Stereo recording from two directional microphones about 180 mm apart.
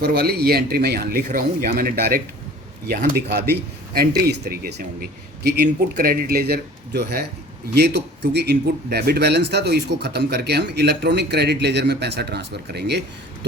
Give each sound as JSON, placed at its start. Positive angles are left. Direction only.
{"t": 0.0, "sound": "a man's voice", "side_deg": -65}